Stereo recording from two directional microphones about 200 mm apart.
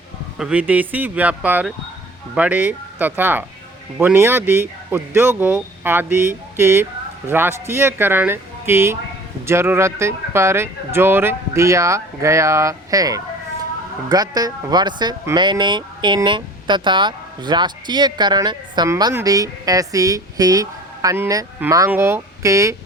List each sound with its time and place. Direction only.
0.3 s speech: 5° right (ahead or behind)